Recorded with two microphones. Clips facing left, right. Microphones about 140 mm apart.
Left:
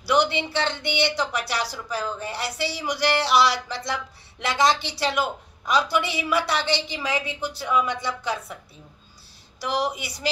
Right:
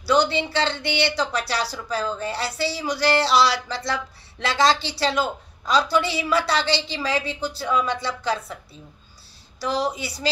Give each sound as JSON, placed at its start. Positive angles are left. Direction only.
{"t": 0.0, "sound": "a woman's voice", "side_deg": 20}
{"t": 9.6, "sound": "a woman's voice", "side_deg": 20}